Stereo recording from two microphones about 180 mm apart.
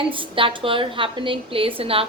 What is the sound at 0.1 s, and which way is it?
A woman's voice, 30° right (ahead or behind).